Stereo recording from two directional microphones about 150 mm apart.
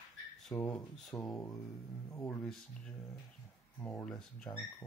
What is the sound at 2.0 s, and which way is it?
Speech, 15° left (ahead or behind).